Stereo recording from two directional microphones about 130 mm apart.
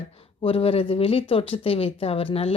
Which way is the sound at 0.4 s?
50° left (ahead or behind).